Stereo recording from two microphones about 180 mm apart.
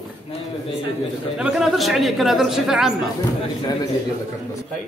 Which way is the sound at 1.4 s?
5° right (ahead or behind).